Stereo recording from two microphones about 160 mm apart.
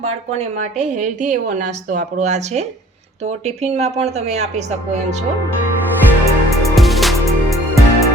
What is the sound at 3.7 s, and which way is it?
Speech, 45° right (ahead or behind).